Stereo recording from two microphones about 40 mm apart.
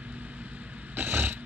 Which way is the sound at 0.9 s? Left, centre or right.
Right.